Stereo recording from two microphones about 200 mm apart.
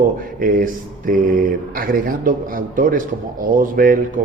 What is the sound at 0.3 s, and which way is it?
A man's voice, 45° right (ahead or behind).